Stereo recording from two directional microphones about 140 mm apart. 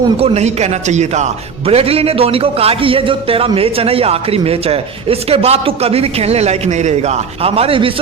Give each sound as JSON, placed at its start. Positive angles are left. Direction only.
{"t": 0.2, "sound": "a man's voice", "side_deg": -50}